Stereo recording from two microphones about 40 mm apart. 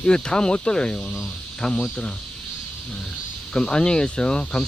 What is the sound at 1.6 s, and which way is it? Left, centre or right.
Speech, centre.